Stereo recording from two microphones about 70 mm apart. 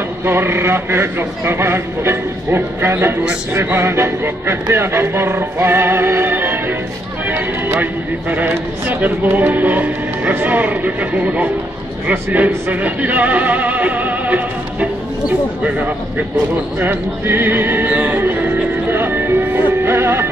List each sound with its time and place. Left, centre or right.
0.2 s a man's voice: right
16.8 s music: right